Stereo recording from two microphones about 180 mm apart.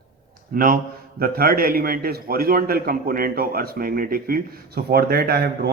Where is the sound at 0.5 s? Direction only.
50° right (ahead or behind).